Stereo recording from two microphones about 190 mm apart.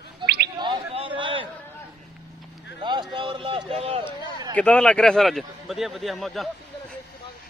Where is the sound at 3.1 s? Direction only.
25° right (ahead or behind).